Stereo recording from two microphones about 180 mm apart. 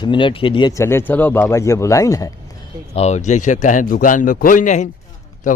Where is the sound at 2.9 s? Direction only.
40° left (ahead or behind).